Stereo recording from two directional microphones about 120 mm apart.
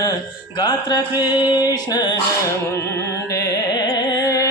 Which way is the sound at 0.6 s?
35° left (ahead or behind).